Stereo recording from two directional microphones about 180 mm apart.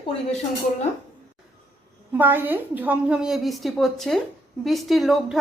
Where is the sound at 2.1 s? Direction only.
10° right (ahead or behind).